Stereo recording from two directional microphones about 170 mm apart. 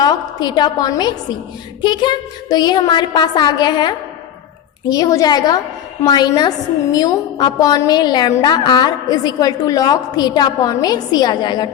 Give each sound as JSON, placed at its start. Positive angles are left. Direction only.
{"t": 0.0, "sound": "a woman's voice", "side_deg": 25}